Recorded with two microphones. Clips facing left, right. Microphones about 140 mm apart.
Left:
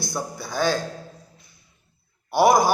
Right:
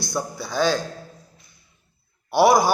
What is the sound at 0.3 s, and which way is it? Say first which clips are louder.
Speech: right 2 dB; 50° left (ahead or behind).